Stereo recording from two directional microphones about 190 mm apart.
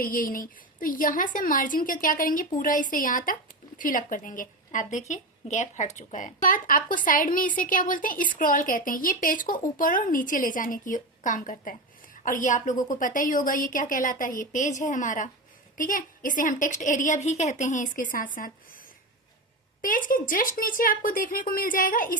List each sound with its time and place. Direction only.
0.0 s a woman's voice: 45° left (ahead or behind)
19.8 s a woman's voice: 45° left (ahead or behind)